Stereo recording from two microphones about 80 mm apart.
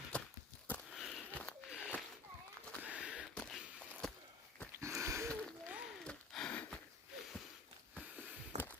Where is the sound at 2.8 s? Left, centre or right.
Centre.